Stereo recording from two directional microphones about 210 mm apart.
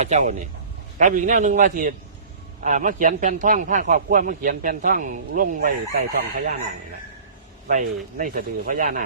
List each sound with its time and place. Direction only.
0.0 s a man's voice: 35° right (ahead or behind)
7.7 s a man's voice: 40° right (ahead or behind)